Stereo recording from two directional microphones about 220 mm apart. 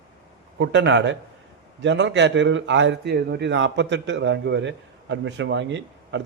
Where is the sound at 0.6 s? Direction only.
55° right (ahead or behind).